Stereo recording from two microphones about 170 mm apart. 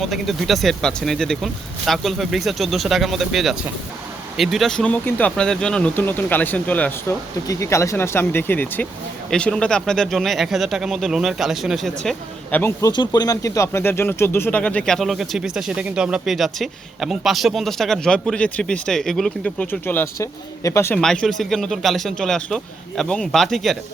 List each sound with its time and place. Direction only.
0.0 s speech: centre (ahead or behind)
7.4 s speech: 20° left (ahead or behind)
12.9 s speech: 25° left (ahead or behind)
21.0 s speech: 5° left (ahead or behind)